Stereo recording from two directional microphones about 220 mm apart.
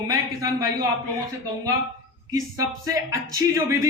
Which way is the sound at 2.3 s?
15° right (ahead or behind).